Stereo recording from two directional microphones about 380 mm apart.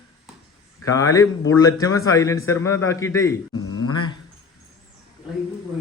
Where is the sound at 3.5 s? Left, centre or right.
Left.